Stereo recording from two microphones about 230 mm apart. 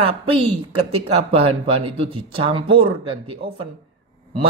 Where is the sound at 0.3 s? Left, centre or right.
Right.